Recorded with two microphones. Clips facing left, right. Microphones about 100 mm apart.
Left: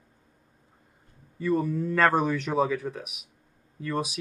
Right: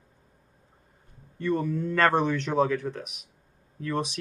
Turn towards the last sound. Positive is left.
turn(degrees=5)  # may be behind; listen again after turning